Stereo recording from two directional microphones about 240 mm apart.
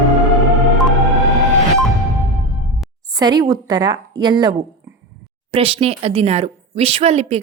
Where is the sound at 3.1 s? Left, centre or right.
Centre.